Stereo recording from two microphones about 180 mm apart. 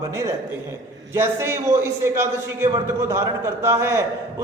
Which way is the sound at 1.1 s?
15° right (ahead or behind).